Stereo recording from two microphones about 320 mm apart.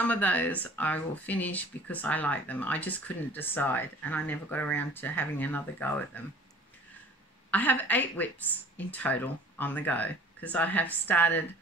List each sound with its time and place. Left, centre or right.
0.0 s speech: centre
7.5 s speech: centre